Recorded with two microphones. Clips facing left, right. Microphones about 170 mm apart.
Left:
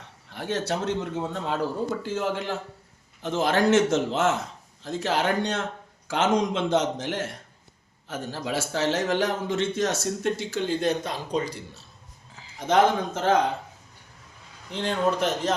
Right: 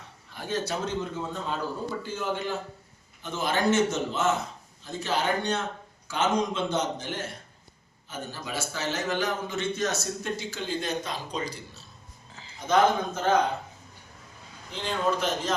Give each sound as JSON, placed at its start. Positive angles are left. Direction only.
{"t": 0.3, "sound": "a man's voice", "side_deg": 70}
{"t": 2.0, "sound": "a man's voice", "side_deg": 90}
{"t": 12.3, "sound": "a sound", "side_deg": 10}
{"t": 12.5, "sound": "a man's voice", "side_deg": 90}
{"t": 14.7, "sound": "a man's voice", "side_deg": 65}